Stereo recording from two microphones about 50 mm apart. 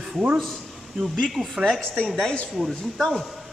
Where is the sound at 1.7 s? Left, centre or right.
Centre.